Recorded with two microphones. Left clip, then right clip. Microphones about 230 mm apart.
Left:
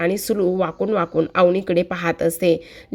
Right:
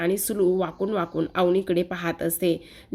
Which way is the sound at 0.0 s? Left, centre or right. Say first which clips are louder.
Left 4 dB; centre.